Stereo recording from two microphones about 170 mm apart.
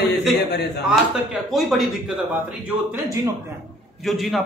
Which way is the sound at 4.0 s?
Centre (ahead or behind).